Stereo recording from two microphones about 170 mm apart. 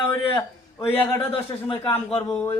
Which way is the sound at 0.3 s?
15° left (ahead or behind).